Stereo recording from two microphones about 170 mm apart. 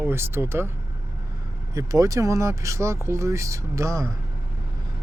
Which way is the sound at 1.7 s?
20° right (ahead or behind).